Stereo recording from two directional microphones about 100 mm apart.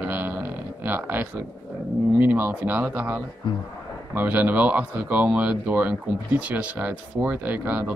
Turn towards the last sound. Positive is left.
turn(degrees=-15)  # may be behind; listen again after turning